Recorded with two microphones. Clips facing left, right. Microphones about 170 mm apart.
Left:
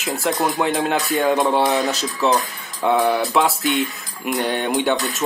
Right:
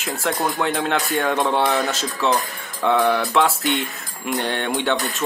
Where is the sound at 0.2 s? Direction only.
5° left (ahead or behind).